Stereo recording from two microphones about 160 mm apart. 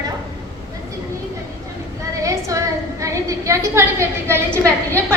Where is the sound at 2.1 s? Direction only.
20° right (ahead or behind).